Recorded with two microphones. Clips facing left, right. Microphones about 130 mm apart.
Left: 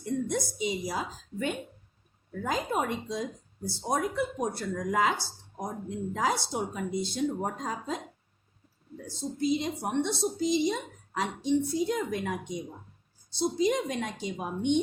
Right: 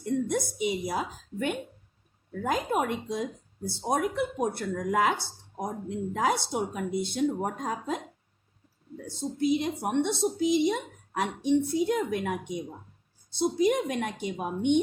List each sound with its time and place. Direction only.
0.0 s a woman's voice: 55° right (ahead or behind)
9.0 s a woman's voice: 60° right (ahead or behind)